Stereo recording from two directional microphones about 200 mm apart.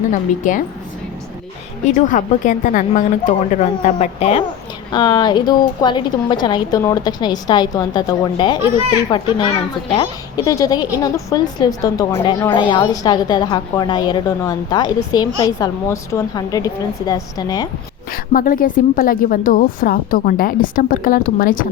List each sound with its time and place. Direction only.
0.1 s a woman's voice: 40° left (ahead or behind)
1.9 s a woman's voice: 40° left (ahead or behind); by 17.7 s 20° left (ahead or behind)
18.1 s a woman's voice: 45° left (ahead or behind)